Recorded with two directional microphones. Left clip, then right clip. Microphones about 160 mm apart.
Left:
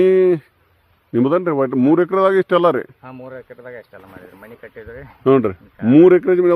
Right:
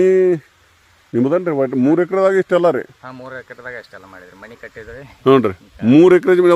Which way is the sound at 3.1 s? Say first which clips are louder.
Right 3 dB; 20° left (ahead or behind).